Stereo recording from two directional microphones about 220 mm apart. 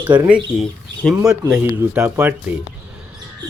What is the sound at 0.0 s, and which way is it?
Speech, 20° right (ahead or behind).